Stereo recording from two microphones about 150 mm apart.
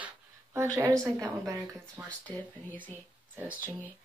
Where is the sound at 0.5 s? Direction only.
20° right (ahead or behind).